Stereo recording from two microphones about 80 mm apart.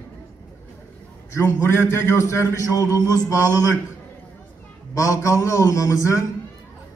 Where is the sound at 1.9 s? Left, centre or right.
Left.